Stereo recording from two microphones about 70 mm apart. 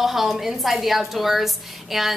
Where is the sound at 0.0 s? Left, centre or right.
Centre.